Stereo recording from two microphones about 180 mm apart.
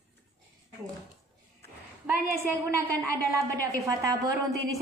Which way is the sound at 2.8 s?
15° right (ahead or behind).